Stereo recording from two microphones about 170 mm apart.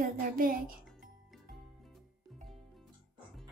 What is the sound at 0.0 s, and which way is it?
Speech, 55° right (ahead or behind).